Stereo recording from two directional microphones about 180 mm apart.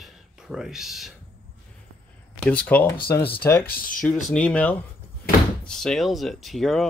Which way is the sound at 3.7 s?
50° left (ahead or behind).